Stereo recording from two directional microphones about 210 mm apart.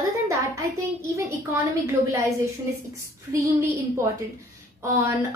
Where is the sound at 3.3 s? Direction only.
15° right (ahead or behind).